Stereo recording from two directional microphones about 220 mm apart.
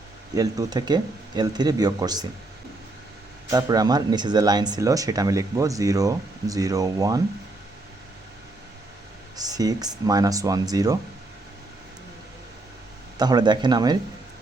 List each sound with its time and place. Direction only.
0.3 s speech: 15° right (ahead or behind)
3.5 s speech: 15° right (ahead or behind)
9.3 s speech: 15° right (ahead or behind)
13.1 s speech: 20° right (ahead or behind)